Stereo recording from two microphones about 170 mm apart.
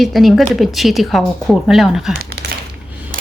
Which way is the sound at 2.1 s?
65° right (ahead or behind).